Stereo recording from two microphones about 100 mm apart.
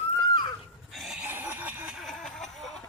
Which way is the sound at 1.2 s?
20° right (ahead or behind).